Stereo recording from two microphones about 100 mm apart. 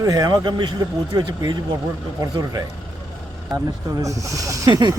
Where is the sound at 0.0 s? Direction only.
35° right (ahead or behind).